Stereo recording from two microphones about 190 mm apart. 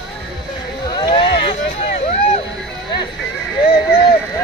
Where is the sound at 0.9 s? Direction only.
20° left (ahead or behind).